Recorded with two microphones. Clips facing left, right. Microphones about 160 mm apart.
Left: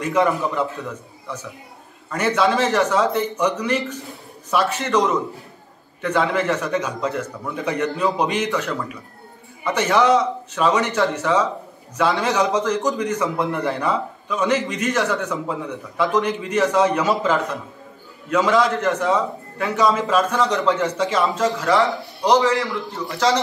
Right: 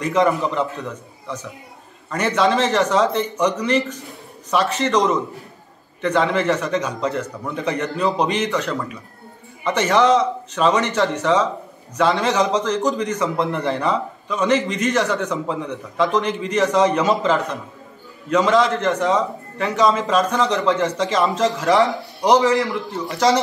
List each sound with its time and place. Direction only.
0.0 s a man's voice: 5° left (ahead or behind)
2.0 s a man's voice: 5° left (ahead or behind)
22.2 s a man's voice: 20° right (ahead or behind)